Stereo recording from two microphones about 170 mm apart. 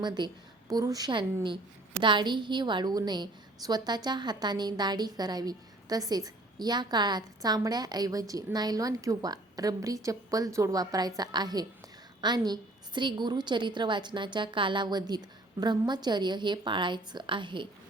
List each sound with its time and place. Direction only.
0.0 s a woman's voice: 25° right (ahead or behind)